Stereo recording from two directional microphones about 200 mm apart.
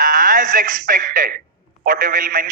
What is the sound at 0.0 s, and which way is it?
Speech, 45° right (ahead or behind).